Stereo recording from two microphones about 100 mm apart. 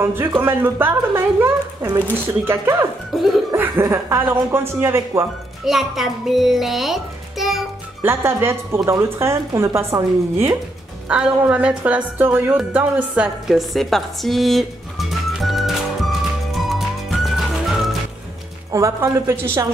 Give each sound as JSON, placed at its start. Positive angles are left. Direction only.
{"t": 0.0, "sound": "speech", "side_deg": -25}
{"t": 3.1, "sound": "laughter", "side_deg": 0}
{"t": 3.5, "sound": "speech", "side_deg": -20}
{"t": 5.7, "sound": "a child's voice", "side_deg": 0}
{"t": 8.0, "sound": "speech", "side_deg": -25}
{"t": 11.1, "sound": "speech", "side_deg": -15}
{"t": 13.5, "sound": "music", "side_deg": 0}
{"t": 18.7, "sound": "speech", "side_deg": -30}